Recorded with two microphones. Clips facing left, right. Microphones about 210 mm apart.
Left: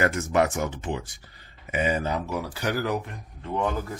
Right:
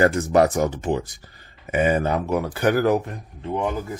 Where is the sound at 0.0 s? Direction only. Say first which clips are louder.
Right 6 dB; 35° right (ahead or behind).